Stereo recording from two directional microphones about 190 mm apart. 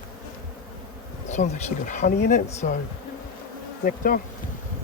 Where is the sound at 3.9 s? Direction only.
45° left (ahead or behind).